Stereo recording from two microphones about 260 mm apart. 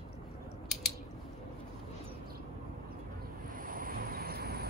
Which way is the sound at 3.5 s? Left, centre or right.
Right.